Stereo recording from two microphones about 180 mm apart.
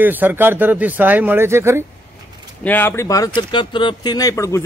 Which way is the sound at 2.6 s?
10° left (ahead or behind).